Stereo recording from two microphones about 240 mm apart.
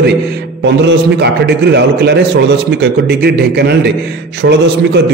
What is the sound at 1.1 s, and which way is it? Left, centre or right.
A man's voice, right.